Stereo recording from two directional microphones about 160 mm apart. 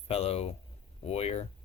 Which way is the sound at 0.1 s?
40° left (ahead or behind).